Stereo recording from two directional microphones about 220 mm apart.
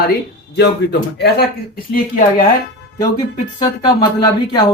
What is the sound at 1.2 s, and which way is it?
Speech, 45° left (ahead or behind).